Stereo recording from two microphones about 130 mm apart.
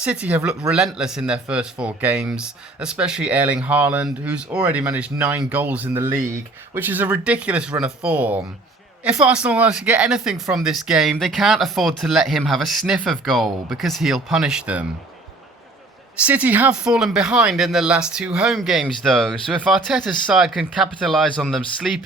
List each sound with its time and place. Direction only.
0.0 s speech: 10° right (ahead or behind)
16.2 s speech: 10° right (ahead or behind)